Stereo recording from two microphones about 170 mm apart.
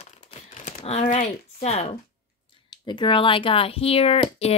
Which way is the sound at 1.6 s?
40° left (ahead or behind).